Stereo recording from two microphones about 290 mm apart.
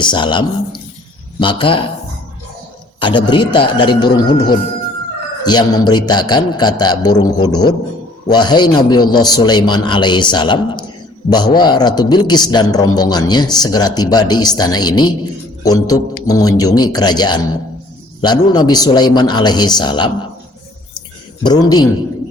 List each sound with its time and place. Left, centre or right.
0.0 s a man's voice: centre
3.0 s a man's voice: centre
21.4 s a man's voice: centre